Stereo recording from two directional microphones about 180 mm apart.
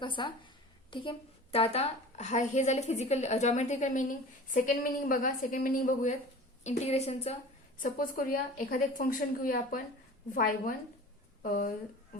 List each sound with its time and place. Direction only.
0.0 s a woman's voice: 25° left (ahead or behind)
7.8 s a woman's voice: 50° left (ahead or behind)